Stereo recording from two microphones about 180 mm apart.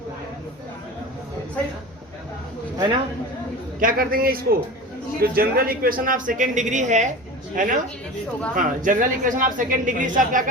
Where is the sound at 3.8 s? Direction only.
50° right (ahead or behind).